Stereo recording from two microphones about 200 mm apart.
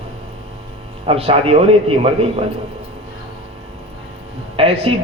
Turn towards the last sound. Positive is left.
turn(degrees=-30)  # may be behind; listen again after turning